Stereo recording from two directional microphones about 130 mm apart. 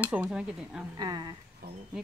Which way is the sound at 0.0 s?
10° right (ahead or behind).